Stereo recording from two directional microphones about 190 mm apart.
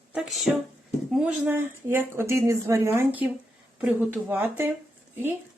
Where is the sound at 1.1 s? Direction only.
5° right (ahead or behind).